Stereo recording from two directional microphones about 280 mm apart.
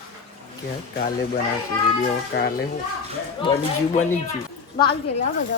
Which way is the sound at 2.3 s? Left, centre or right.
Left.